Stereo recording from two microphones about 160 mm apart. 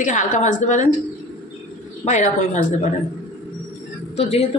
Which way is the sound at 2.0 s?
50° left (ahead or behind).